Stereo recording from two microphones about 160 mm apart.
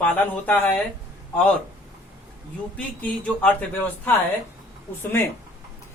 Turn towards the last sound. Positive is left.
turn(degrees=15)  # may be behind; listen again after turning